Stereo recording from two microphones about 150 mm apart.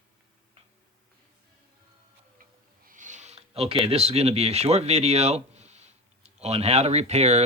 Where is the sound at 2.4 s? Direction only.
60° right (ahead or behind); by 3.8 s 40° right (ahead or behind).